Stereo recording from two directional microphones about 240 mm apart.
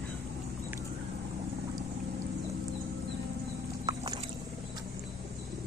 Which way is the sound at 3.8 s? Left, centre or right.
Centre.